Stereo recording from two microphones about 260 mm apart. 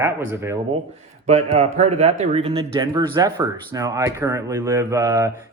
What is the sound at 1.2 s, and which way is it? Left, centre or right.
Speech, right.